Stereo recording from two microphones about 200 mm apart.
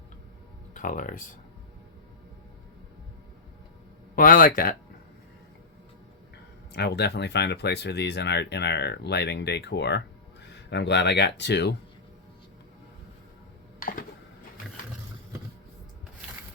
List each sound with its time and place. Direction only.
0.7 s speech: 40° left (ahead or behind)
4.1 s speech: 45° left (ahead or behind)
6.7 s speech: 55° left (ahead or behind)
13.7 s a sound: 45° left (ahead or behind)